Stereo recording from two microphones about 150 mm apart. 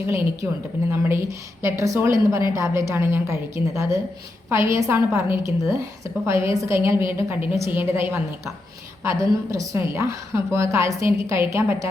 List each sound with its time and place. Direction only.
0.9 s a woman's voice: 15° right (ahead or behind)